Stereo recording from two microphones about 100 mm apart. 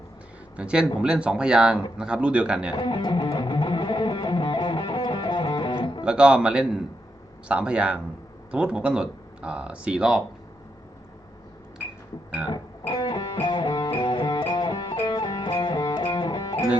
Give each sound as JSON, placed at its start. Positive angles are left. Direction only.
{"t": 0.5, "sound": "speech", "side_deg": -10}
{"t": 2.7, "sound": "music", "side_deg": 55}
{"t": 6.1, "sound": "speech", "side_deg": -10}
{"t": 12.9, "sound": "music", "side_deg": 50}